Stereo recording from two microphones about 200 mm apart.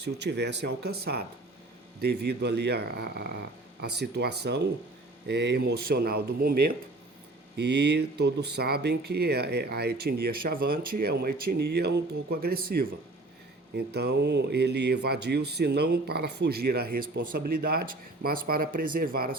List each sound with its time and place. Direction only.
0.0 s speech: 55° right (ahead or behind)